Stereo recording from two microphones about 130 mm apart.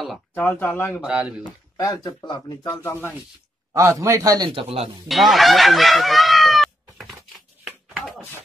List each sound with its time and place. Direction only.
0.3 s speech: 15° left (ahead or behind)
1.0 s speech: 5° right (ahead or behind)
1.4 s speech: 30° left (ahead or behind)
2.8 s speech: 20° left (ahead or behind)
3.7 s a man's voice: 25° right (ahead or behind)
4.5 s speech: 45° right (ahead or behind)
5.0 s fowl: centre (ahead or behind)